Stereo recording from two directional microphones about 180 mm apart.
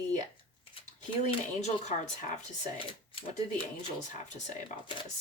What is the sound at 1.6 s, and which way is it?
Speech, 40° left (ahead or behind).